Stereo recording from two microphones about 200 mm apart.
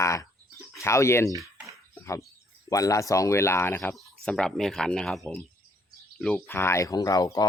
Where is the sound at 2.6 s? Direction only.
15° left (ahead or behind).